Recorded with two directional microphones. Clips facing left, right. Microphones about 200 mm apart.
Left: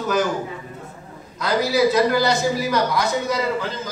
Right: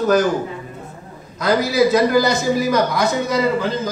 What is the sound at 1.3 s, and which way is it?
A man's voice, 45° right (ahead or behind).